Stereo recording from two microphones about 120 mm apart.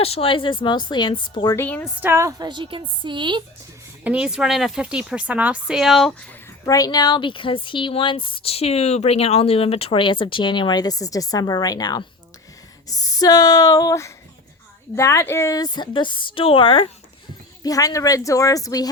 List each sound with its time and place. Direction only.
0.0 s speech: 55° left (ahead or behind)
1.5 s a woman's voice: 15° left (ahead or behind)
2.0 s a woman's voice: 20° right (ahead or behind)
2.4 s a woman's voice: 40° right (ahead or behind)
4.0 s speech: 10° right (ahead or behind)
6.7 s speech: 30° left (ahead or behind); by 16.9 s 45° left (ahead or behind)
17.6 s speech: 30° left (ahead or behind)